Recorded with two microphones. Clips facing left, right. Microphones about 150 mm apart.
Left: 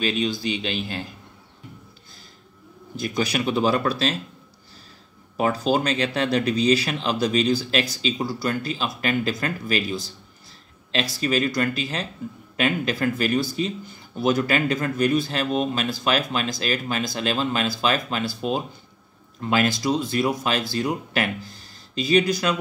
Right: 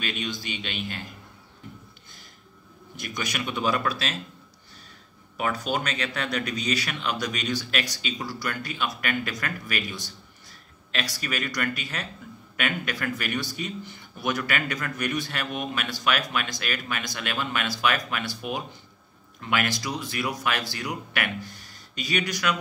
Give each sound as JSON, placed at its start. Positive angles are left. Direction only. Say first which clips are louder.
{"t": 0.0, "sound": "speech", "louder": "left 8 dB", "side_deg": 35}
{"t": 3.0, "sound": "speech", "louder": "left 8 dB", "side_deg": 30}
{"t": 5.4, "sound": "speech", "louder": "left 6 dB", "side_deg": 30}